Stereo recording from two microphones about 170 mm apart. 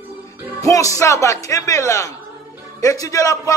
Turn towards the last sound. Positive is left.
turn(degrees=20)  # may be behind; listen again after turning